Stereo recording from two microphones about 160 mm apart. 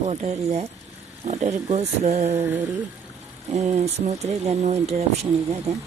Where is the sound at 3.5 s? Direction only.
45° right (ahead or behind).